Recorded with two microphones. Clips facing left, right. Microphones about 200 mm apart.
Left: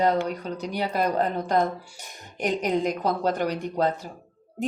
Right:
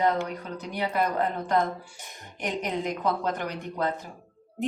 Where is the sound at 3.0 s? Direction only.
35° left (ahead or behind).